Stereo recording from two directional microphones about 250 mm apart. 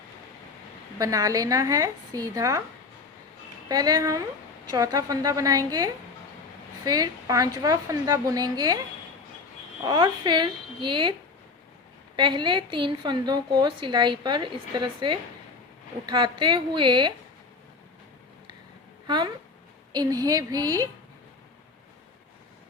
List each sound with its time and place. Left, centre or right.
0.9 s a woman's voice: centre
3.7 s a woman's voice: centre
9.8 s a woman's voice: centre
12.1 s a woman's voice: centre
19.0 s a woman's voice: centre